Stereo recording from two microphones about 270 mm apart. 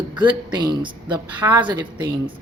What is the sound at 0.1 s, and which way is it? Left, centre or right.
Speech, centre.